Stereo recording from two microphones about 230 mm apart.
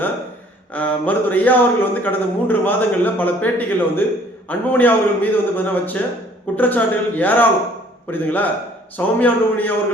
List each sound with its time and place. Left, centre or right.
0.7 s a man's voice: centre